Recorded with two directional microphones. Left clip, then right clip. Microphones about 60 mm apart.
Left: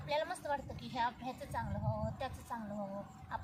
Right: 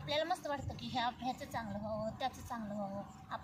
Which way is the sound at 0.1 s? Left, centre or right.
Left.